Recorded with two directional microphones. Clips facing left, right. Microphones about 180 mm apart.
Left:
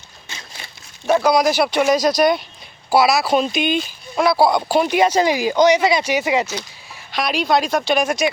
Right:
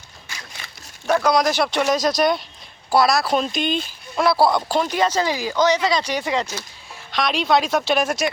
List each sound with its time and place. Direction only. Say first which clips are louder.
0.3 s a sound: left 1 dB; 25° left (ahead or behind)
1.2 s speech: left 2 dB; 5° left (ahead or behind)
4.7 s speech: left 4 dB; 10° left (ahead or behind)